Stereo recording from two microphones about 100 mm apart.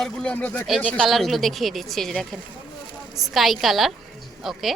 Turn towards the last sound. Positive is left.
turn(degrees=0)  # may be behind; listen again after turning